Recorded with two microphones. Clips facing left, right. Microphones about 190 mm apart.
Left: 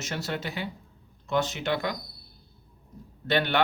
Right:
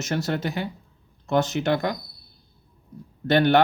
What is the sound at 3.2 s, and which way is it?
Speech, 45° right (ahead or behind).